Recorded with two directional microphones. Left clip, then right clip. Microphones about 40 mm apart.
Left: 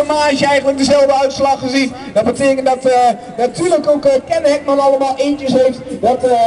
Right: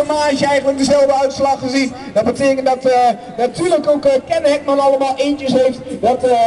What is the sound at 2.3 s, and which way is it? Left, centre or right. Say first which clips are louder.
A man's voice: left 1 dB; centre.